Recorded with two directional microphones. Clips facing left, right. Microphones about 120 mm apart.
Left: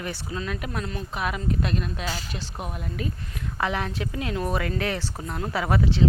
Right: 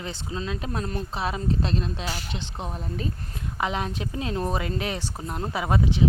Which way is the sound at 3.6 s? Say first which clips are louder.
Even; 20° right (ahead or behind).